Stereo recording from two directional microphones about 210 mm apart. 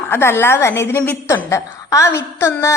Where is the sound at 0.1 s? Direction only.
10° left (ahead or behind).